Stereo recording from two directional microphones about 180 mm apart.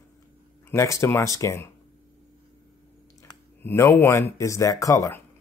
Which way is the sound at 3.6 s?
15° left (ahead or behind).